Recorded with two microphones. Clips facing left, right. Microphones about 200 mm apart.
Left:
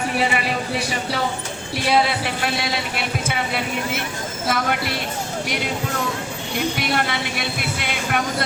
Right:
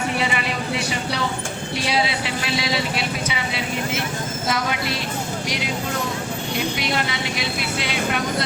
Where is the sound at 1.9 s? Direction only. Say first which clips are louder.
Left 5 dB; 55° left (ahead or behind).